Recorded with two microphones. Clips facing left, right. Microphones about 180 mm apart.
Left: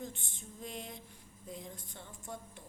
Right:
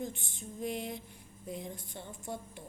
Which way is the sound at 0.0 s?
15° right (ahead or behind).